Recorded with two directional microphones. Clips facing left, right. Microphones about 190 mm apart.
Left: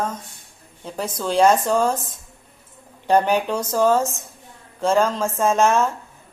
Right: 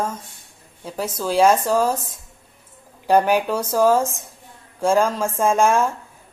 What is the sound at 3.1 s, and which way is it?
Speech, 10° right (ahead or behind).